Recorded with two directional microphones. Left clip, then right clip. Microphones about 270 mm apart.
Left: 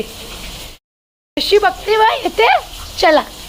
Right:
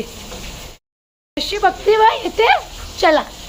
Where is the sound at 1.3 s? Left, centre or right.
Centre.